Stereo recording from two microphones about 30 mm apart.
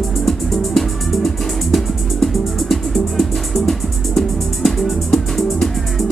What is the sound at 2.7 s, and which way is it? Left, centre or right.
Music, centre.